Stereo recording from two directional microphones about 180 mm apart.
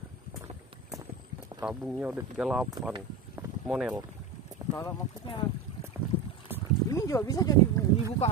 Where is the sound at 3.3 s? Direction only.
5° right (ahead or behind).